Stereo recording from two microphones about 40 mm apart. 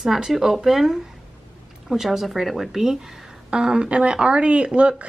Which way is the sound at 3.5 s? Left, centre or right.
Right.